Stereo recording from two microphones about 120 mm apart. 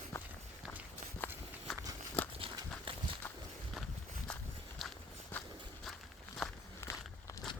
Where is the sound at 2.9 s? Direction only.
50° right (ahead or behind).